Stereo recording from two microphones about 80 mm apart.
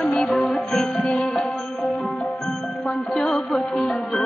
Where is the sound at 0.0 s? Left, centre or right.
Centre.